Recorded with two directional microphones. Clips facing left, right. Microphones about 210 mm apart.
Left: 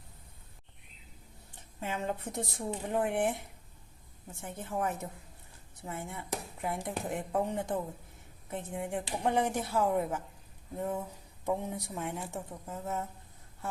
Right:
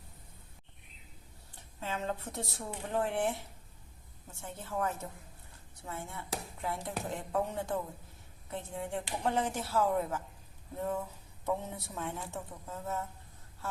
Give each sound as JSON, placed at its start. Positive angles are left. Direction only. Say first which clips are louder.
{"t": 1.8, "sound": "a woman's voice", "louder": "left 2 dB", "side_deg": 15}
{"t": 4.4, "sound": "a woman's voice", "louder": "left 1 dB", "side_deg": 15}